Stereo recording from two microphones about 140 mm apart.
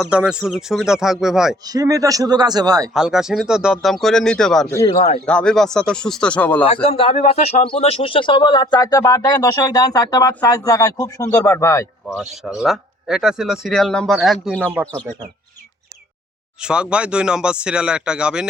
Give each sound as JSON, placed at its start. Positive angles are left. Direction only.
{"t": 0.0, "sound": "speech", "side_deg": -5}
{"t": 1.6, "sound": "a man's voice", "side_deg": -25}
{"t": 2.9, "sound": "speech", "side_deg": 0}
{"t": 4.7, "sound": "speech", "side_deg": 20}
{"t": 5.2, "sound": "speech", "side_deg": 5}
{"t": 6.8, "sound": "speech", "side_deg": 40}
{"t": 12.0, "sound": "speech", "side_deg": 0}
{"t": 14.6, "sound": "speech", "side_deg": -10}
{"t": 16.6, "sound": "speech", "side_deg": -5}